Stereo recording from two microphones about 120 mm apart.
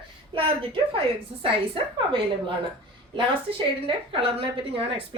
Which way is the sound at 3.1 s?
50° right (ahead or behind).